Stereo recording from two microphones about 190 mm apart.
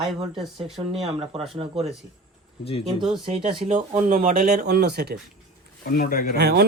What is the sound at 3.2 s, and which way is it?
Speech, 30° right (ahead or behind).